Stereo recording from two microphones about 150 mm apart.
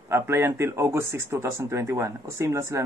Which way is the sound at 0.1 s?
15° right (ahead or behind).